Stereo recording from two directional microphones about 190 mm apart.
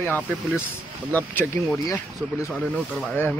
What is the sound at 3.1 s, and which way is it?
Speech, 10° left (ahead or behind).